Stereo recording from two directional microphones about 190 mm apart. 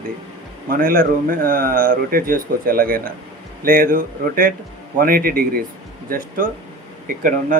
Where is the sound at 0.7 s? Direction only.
50° right (ahead or behind).